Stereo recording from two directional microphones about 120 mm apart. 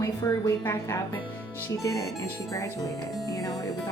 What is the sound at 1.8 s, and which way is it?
Speech, 30° left (ahead or behind).